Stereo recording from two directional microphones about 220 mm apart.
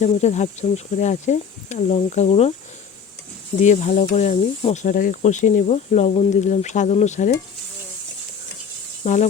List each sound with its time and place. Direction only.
0.0 s speech: 30° left (ahead or behind)
3.6 s speech: 35° left (ahead or behind)
9.0 s speech: 30° left (ahead or behind)